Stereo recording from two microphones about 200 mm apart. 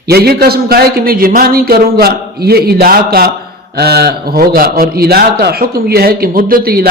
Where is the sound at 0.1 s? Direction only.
50° right (ahead or behind).